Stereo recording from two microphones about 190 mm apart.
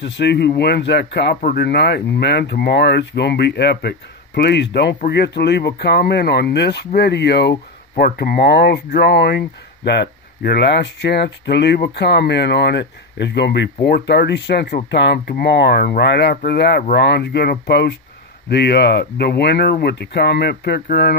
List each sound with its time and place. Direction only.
0.0 s speech: 65° left (ahead or behind)